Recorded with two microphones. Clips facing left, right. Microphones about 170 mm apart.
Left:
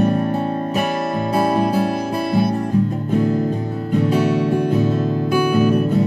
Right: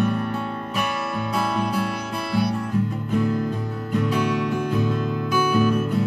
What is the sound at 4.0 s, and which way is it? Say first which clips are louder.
Music: left 5 dB; 45° left (ahead or behind).